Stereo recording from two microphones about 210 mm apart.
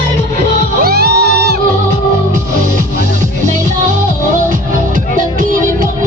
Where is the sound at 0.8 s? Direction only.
50° right (ahead or behind).